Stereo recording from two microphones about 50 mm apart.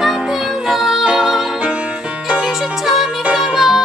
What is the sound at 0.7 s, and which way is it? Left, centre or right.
Music, centre.